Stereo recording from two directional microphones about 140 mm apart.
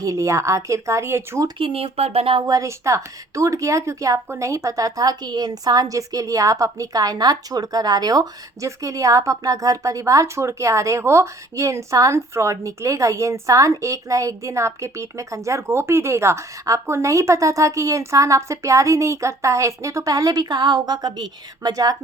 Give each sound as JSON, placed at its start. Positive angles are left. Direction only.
{"t": 0.0, "sound": "speech", "side_deg": -20}
{"t": 1.5, "sound": "speech", "side_deg": -40}
{"t": 2.4, "sound": "speech", "side_deg": -25}